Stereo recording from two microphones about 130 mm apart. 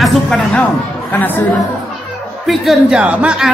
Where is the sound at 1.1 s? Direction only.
15° left (ahead or behind).